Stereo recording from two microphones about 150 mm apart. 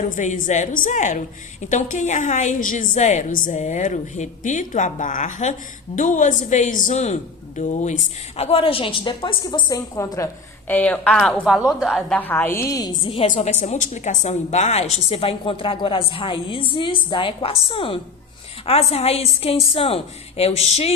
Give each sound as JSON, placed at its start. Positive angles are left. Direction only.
{"t": 0.2, "sound": "a woman's voice", "side_deg": 55}
{"t": 8.4, "sound": "a woman's voice", "side_deg": 40}
{"t": 10.7, "sound": "a woman's voice", "side_deg": 10}
{"t": 13.3, "sound": "a woman's voice", "side_deg": 50}